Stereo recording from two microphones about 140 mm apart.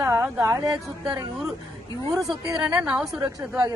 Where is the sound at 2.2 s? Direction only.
5° right (ahead or behind).